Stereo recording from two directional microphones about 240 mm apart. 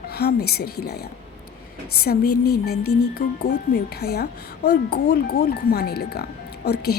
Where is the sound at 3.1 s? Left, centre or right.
Left.